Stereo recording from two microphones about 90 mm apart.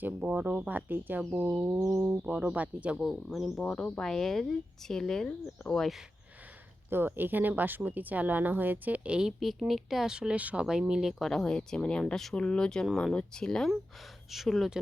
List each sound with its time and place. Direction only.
0.0 s speech: 20° right (ahead or behind)
3.0 s speech: centre (ahead or behind)
3.6 s speech: 10° left (ahead or behind)
6.9 s speech: 25° right (ahead or behind); by 14.8 s centre (ahead or behind)